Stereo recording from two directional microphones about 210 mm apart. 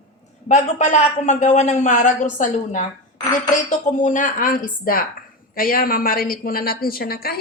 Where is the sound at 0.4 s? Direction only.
35° left (ahead or behind).